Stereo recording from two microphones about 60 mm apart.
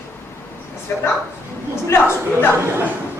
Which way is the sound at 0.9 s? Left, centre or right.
Left.